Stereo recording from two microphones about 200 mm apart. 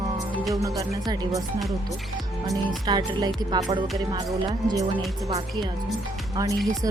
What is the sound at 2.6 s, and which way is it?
Music, 20° right (ahead or behind).